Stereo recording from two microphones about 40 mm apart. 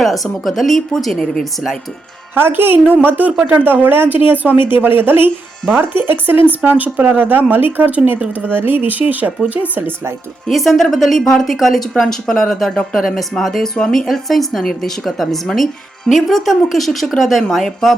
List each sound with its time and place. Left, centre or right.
0.0 s a woman's voice: centre
2.3 s a woman's voice: right
6.7 s a woman's voice: right
10.5 s a woman's voice: centre